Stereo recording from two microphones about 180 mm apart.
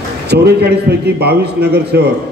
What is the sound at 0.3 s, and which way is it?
A man's voice, 65° right (ahead or behind).